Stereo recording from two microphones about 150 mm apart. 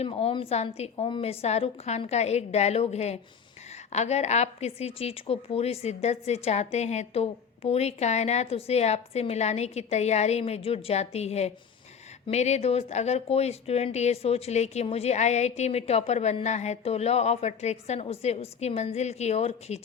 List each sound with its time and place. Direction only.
0.0 s a woman's voice: 40° left (ahead or behind)